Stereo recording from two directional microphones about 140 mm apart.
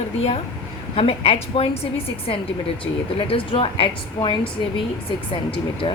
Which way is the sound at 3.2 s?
40° left (ahead or behind).